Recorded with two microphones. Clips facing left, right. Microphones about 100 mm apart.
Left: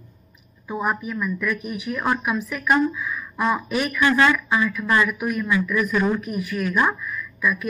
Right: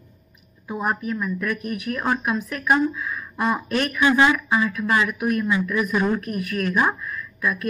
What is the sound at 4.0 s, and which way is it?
Speech, 15° right (ahead or behind).